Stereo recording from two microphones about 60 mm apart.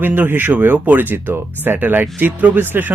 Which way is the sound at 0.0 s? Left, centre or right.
Right.